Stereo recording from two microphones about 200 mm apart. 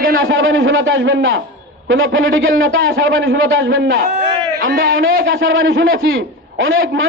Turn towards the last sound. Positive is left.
turn(degrees=-85)